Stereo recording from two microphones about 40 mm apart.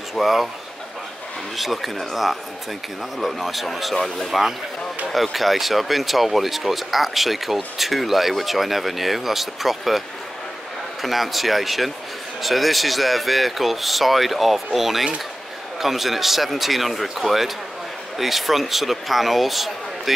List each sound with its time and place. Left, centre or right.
0.1 s speech: centre
1.6 s speech: centre